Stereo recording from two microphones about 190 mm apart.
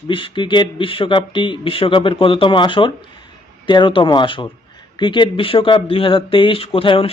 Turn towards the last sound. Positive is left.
turn(degrees=30)  # may be behind; listen again after turning